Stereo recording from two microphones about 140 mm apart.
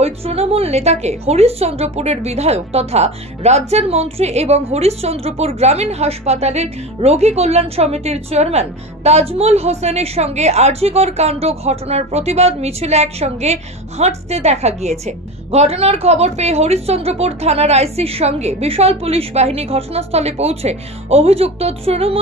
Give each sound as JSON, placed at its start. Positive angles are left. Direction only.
{"t": 0.0, "sound": "a woman's voice", "side_deg": -45}